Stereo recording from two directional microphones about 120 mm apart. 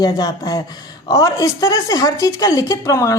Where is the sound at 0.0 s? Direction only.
30° left (ahead or behind).